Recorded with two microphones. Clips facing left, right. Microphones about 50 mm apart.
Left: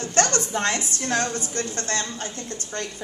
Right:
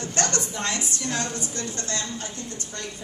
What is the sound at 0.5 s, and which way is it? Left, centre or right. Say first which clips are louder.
A woman's voice: left 4 dB; left.